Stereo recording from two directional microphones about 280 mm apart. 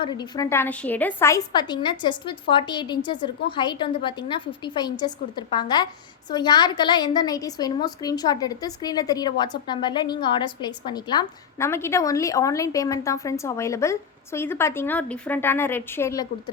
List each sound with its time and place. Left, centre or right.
0.0 s a woman's voice: centre